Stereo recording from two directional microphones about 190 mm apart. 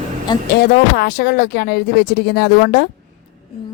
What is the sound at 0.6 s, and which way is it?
Speech, 55° left (ahead or behind).